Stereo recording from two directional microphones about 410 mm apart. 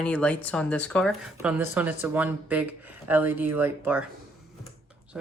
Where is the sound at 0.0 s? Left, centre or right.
Centre.